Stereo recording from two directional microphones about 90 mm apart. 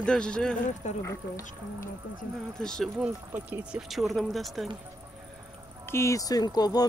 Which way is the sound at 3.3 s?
15° right (ahead or behind).